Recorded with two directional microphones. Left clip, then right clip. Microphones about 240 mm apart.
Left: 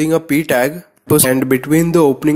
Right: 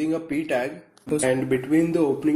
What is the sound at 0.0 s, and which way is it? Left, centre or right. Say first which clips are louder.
Speech: left 11 dB; left.